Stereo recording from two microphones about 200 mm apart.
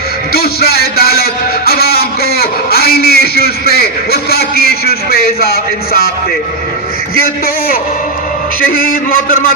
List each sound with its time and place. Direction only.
0.3 s speech: 50° left (ahead or behind)
7.2 s speech: 50° left (ahead or behind)